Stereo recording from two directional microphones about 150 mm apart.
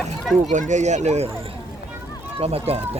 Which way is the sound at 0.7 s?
50° right (ahead or behind).